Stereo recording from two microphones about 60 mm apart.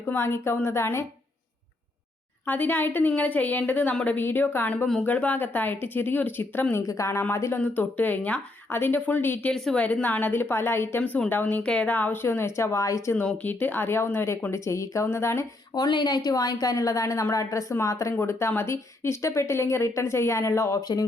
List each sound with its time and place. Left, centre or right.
0.2 s speech: left
2.5 s speech: left
6.8 s speech: left
7.6 s speech: left
11.6 s speech: centre
11.9 s speech: left
13.4 s speech: left
14.5 s speech: left
15.0 s speech: left
15.7 s a woman's voice: left
18.2 s speech: left
20.8 s a woman's voice: left